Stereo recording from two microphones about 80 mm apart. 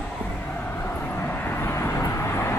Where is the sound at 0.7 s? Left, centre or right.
Left.